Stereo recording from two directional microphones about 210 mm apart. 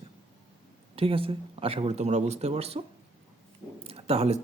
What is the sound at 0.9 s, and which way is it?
Speech, 25° right (ahead or behind).